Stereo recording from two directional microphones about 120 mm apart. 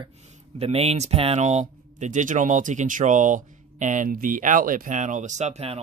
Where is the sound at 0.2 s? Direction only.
65° right (ahead or behind).